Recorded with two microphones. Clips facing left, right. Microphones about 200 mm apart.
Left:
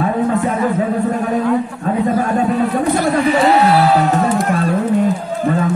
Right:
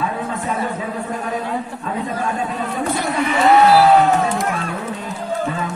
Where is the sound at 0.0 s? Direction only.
55° left (ahead or behind).